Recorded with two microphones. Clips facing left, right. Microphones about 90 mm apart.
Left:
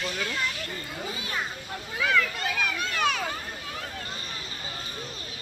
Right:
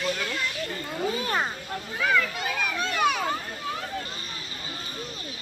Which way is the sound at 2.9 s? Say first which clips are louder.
Right 3 dB; 5° right (ahead or behind).